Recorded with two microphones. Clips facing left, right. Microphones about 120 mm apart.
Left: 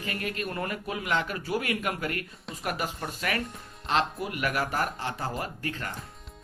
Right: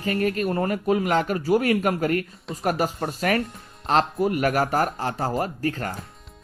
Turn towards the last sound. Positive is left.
turn(degrees=-40)  # may be behind; listen again after turning